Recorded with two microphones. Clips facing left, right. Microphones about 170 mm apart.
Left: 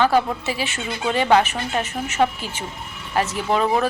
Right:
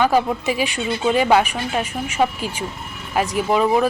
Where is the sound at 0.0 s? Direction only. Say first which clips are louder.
Right 1 dB; 10° right (ahead or behind).